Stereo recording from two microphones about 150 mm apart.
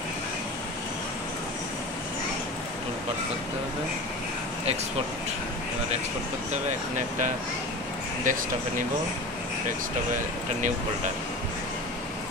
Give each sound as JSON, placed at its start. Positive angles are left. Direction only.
{"t": 8.2, "sound": "speech", "side_deg": -60}